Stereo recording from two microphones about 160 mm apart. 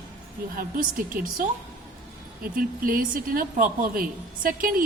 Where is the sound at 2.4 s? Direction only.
65° right (ahead or behind).